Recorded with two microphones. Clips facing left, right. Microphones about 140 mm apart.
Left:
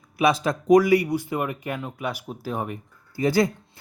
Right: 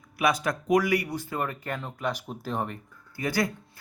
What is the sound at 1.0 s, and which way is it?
Speech, 15° left (ahead or behind).